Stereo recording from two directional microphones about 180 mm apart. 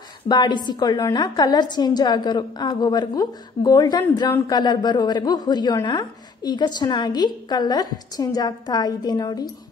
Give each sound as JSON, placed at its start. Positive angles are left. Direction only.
{"t": 0.3, "sound": "a woman's voice", "side_deg": 25}